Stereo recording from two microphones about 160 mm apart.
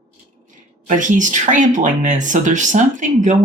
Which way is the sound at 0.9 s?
50° right (ahead or behind).